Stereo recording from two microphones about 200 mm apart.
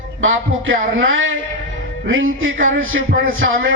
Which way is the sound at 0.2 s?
80° right.